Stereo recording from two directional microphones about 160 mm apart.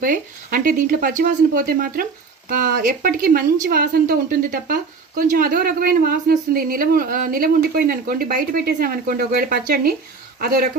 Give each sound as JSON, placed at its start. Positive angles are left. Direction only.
{"t": 0.0, "sound": "speech", "side_deg": -60}